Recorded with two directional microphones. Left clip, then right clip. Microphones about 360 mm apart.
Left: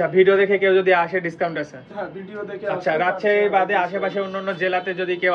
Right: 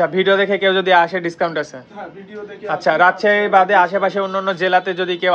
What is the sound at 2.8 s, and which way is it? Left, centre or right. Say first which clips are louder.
Speech: right 7 dB; right.